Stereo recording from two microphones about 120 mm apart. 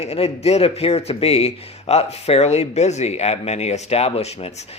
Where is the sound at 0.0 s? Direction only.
60° left (ahead or behind).